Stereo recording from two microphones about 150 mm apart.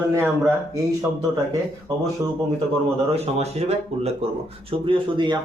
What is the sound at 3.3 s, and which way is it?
Speech, 45° right (ahead or behind).